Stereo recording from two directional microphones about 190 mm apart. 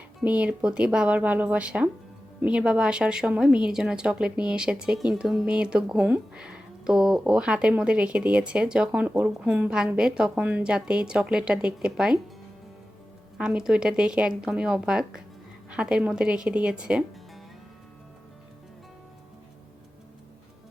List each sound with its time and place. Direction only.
0.2 s a woman's voice: 5° right (ahead or behind)
13.4 s a woman's voice: 5° right (ahead or behind)